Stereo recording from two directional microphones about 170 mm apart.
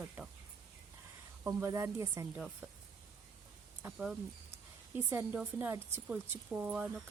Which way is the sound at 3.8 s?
5° right (ahead or behind).